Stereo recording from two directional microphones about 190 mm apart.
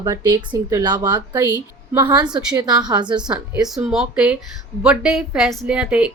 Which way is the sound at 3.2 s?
10° right (ahead or behind).